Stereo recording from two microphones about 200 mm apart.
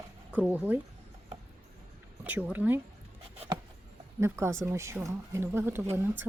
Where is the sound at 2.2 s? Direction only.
10° right (ahead or behind).